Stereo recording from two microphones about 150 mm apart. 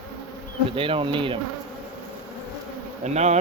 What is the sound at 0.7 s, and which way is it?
Speech, 35° right (ahead or behind).